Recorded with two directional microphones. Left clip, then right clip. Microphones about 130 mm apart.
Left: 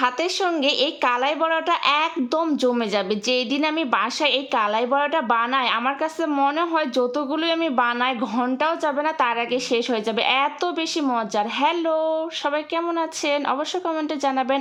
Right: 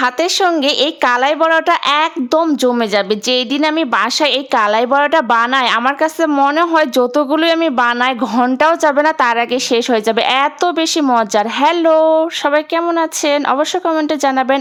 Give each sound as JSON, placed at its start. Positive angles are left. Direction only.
{"t": 0.0, "sound": "a woman's voice", "side_deg": -30}